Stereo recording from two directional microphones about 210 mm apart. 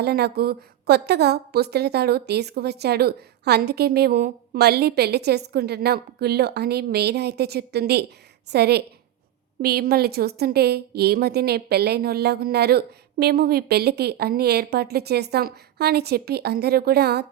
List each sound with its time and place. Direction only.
0.0 s a woman's voice: 50° right (ahead or behind)